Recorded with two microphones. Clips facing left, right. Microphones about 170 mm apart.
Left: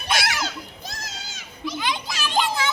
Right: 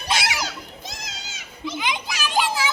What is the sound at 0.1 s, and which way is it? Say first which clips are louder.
Children playing: even; 15° right (ahead or behind).